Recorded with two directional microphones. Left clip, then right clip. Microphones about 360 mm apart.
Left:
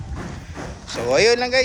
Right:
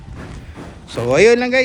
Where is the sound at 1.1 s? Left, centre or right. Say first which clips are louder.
Right 4 dB; right.